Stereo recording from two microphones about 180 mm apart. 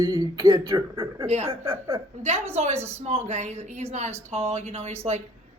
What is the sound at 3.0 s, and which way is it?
A woman's voice, 40° right (ahead or behind).